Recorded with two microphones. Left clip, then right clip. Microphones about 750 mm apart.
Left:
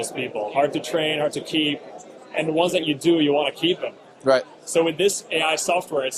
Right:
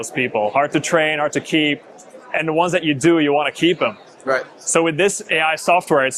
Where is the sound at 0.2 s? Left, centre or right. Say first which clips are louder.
Right 5 dB; right.